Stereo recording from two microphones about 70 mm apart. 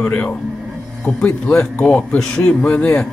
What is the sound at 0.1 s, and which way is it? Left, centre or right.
Speech, left.